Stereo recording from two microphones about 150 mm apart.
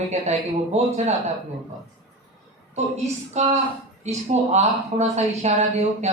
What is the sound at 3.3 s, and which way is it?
Speech, 50° right (ahead or behind).